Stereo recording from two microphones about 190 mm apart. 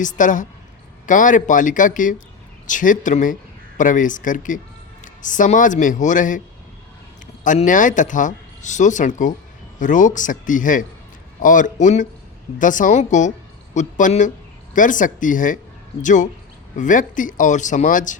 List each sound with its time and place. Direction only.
0.0 s speech: 40° left (ahead or behind)
7.4 s speech: 40° left (ahead or behind)